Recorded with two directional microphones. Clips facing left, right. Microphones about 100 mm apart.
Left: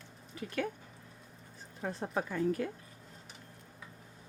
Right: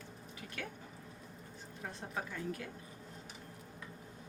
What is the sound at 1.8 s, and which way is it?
Speech, 70° left (ahead or behind).